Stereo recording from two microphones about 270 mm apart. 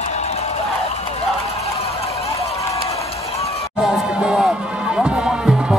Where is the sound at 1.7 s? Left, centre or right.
Left.